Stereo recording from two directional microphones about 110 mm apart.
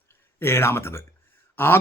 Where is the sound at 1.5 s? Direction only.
20° left (ahead or behind).